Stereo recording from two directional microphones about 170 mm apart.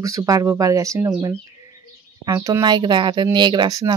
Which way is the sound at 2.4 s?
20° right (ahead or behind).